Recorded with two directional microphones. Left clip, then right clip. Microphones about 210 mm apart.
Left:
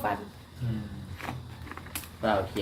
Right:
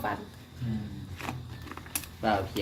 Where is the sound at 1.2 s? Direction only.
15° right (ahead or behind).